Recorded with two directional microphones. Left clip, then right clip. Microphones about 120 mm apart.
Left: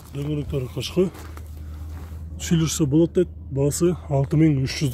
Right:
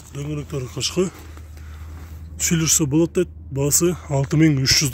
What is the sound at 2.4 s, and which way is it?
Speech, 20° right (ahead or behind).